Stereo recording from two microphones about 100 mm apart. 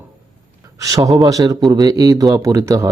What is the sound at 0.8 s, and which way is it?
Speech, 35° right (ahead or behind).